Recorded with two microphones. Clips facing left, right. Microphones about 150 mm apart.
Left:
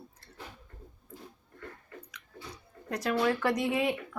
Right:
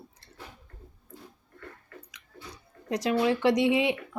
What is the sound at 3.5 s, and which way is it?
Speech, 90° right.